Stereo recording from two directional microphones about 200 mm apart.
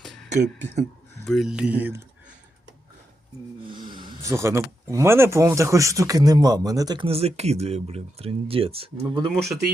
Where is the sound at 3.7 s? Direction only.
25° right (ahead or behind).